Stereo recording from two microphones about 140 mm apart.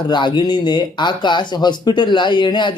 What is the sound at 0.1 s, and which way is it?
Speech, 35° left (ahead or behind).